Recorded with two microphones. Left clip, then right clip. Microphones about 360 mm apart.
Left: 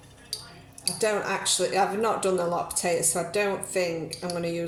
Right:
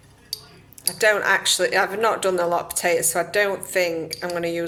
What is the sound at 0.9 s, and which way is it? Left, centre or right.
Speech, right.